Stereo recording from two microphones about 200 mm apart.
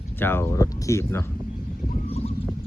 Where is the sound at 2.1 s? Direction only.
30° left (ahead or behind).